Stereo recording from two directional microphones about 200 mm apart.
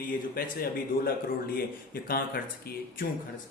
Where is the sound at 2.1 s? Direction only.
45° left (ahead or behind).